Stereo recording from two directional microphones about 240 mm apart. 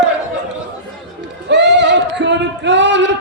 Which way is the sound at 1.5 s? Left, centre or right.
Right.